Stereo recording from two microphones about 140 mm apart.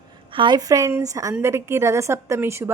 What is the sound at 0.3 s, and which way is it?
Speech, 30° right (ahead or behind).